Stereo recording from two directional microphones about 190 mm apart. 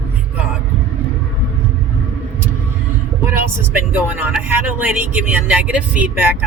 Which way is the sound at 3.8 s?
10° right (ahead or behind).